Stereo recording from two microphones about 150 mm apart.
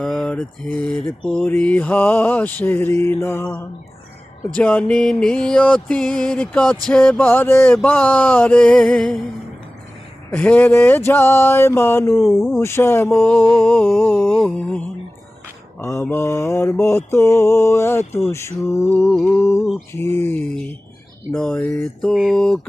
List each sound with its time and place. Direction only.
0.0 s mantra: 5° left (ahead or behind)
10.3 s mantra: 10° left (ahead or behind)
13.3 s a sound: 5° left (ahead or behind)
14.3 s mantra: 10° left (ahead or behind)
15.8 s mantra: 15° left (ahead or behind)
22.1 s a sound: centre (ahead or behind)